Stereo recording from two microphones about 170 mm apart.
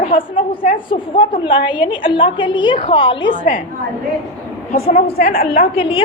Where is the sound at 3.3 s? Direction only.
55° left (ahead or behind).